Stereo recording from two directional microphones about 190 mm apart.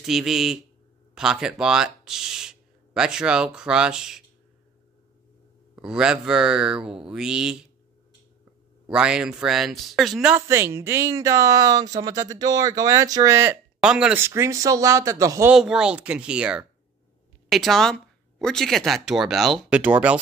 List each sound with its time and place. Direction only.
0.0 s speech: centre (ahead or behind)
5.8 s speech: 5° right (ahead or behind)
8.8 s speech: 5° right (ahead or behind)
15.5 s speech: 5° right (ahead or behind)